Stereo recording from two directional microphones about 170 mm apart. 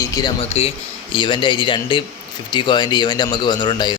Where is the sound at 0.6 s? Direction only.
35° left (ahead or behind).